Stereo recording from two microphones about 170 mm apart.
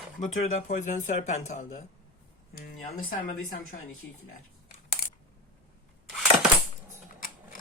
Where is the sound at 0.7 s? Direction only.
50° left (ahead or behind).